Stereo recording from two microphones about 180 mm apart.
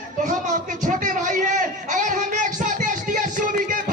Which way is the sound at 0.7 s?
45° right (ahead or behind).